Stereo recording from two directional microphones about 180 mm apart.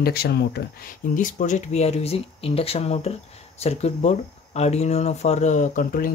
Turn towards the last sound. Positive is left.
turn(degrees=50)  # may be behind; listen again after turning